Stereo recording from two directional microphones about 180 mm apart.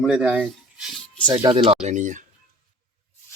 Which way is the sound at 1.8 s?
40° right (ahead or behind).